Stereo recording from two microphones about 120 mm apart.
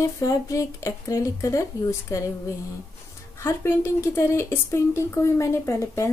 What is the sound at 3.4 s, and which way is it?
A woman's voice, 20° left (ahead or behind).